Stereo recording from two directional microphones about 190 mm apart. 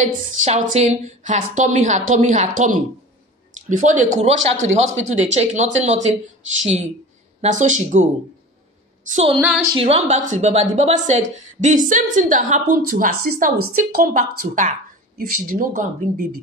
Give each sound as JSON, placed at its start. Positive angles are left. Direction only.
{"t": 0.0, "sound": "a woman's voice", "side_deg": -40}
{"t": 7.4, "sound": "a woman's voice", "side_deg": -40}
{"t": 9.1, "sound": "a woman's voice", "side_deg": -30}
{"t": 9.4, "sound": "speech", "side_deg": 0}
{"t": 9.8, "sound": "a woman's voice", "side_deg": -35}